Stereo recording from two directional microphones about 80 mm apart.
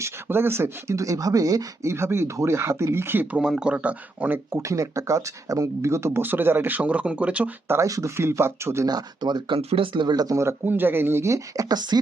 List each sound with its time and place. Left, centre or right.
0.0 s speech: right
3.6 s speech: centre
4.5 s speech: right; by 7.5 s centre
7.7 s speech: right
8.9 s speech: right
10.7 s speech: right
11.7 s speech: right